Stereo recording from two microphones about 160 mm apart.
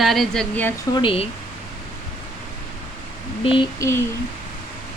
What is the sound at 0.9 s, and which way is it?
Speech, 35° left (ahead or behind).